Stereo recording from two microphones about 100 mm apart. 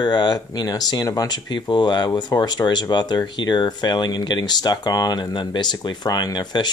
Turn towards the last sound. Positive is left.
turn(degrees=45)  # may be behind; listen again after turning